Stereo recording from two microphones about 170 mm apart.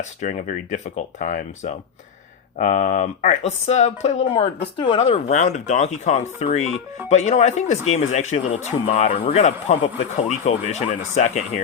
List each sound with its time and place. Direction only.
0.0 s speech: 45° left (ahead or behind)